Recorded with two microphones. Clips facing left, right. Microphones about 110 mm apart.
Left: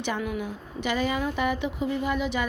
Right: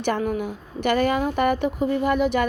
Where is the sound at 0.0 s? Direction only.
45° right (ahead or behind).